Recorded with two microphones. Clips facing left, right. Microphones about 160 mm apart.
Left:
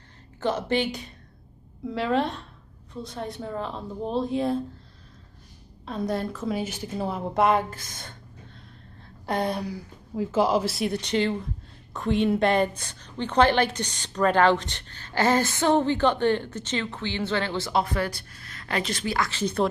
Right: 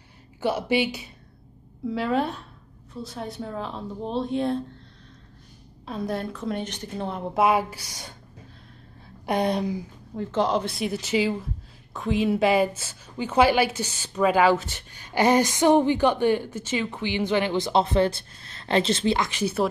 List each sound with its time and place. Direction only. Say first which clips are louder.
0.4 s a woman's voice: right 1 dB; 10° right (ahead or behind)
5.9 s a woman's voice: left 1 dB; centre (ahead or behind)
9.2 s a woman's voice: right 3 dB; 15° right (ahead or behind)
10.1 s a woman's voice: left 1 dB; 5° left (ahead or behind); by 19.4 s 20° right (ahead or behind)
19.4 s a woman's voice: left 1 dB; 5° right (ahead or behind)